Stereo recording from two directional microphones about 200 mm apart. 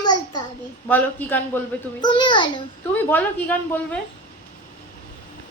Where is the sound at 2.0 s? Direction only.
25° left (ahead or behind).